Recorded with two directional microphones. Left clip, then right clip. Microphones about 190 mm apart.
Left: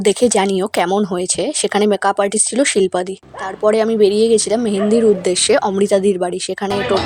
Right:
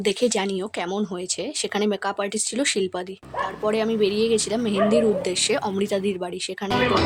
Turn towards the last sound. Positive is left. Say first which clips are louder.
# left 4 dB
turn(degrees=35)  # may be behind; listen again after turning